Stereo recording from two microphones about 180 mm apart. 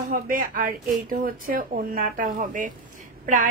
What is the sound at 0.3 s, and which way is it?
A woman's voice, 50° right (ahead or behind).